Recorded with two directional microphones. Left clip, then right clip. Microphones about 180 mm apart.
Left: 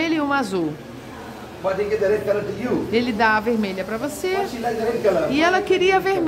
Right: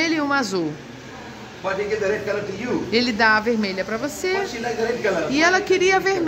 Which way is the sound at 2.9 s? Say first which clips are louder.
Right 2 dB; 10° right (ahead or behind).